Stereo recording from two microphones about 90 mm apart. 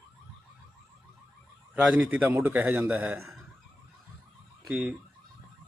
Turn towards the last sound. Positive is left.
turn(degrees=-20)  # may be behind; listen again after turning